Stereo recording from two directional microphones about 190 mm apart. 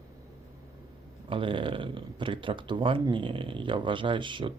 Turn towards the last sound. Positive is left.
turn(degrees=-25)  # may be behind; listen again after turning